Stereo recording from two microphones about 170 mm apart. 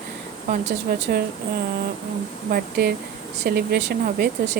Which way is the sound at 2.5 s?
65° right (ahead or behind).